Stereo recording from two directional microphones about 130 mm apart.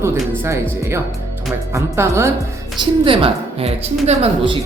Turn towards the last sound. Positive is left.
turn(degrees=-50)  # may be behind; listen again after turning